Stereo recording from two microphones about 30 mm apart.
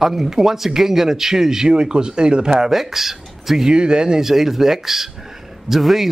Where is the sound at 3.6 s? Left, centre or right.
Right.